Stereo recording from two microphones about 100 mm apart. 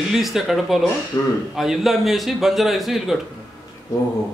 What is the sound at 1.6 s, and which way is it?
Speech, centre (ahead or behind).